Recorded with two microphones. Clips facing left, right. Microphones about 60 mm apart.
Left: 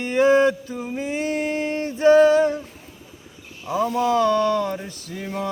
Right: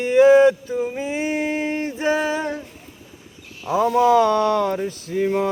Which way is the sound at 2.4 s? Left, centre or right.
Right.